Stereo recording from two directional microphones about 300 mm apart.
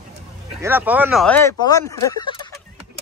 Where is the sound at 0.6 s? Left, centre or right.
Centre.